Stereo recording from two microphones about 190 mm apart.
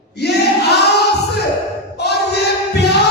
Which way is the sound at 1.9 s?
60° left (ahead or behind).